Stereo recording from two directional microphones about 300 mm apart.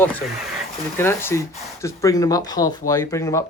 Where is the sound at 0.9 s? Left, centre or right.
Centre.